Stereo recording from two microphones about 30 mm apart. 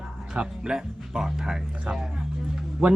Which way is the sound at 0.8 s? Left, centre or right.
Centre.